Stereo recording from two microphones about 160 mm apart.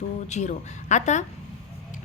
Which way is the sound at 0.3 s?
45° left (ahead or behind).